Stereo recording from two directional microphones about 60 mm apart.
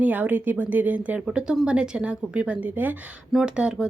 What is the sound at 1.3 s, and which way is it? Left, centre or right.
Speech, centre.